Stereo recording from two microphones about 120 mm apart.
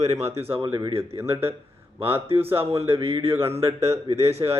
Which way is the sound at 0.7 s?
35° right (ahead or behind).